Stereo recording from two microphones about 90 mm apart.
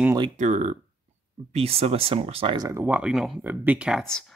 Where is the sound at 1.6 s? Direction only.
90° right.